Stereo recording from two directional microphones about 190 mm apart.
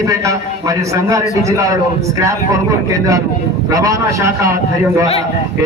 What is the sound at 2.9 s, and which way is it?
A man's voice, 20° right (ahead or behind).